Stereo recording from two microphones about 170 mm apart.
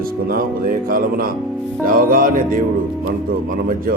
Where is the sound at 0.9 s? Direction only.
60° right (ahead or behind).